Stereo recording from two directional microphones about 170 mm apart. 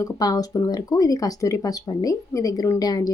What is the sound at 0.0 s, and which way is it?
Speech, 20° left (ahead or behind).